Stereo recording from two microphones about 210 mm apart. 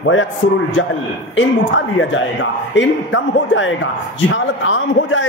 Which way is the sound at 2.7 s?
60° left (ahead or behind).